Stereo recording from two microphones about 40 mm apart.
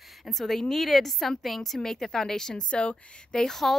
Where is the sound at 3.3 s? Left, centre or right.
Centre.